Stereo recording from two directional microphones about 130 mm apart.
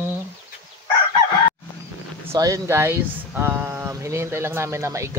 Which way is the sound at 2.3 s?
25° right (ahead or behind).